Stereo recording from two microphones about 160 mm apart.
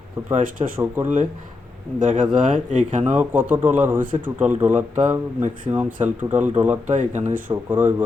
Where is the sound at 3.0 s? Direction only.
10° right (ahead or behind).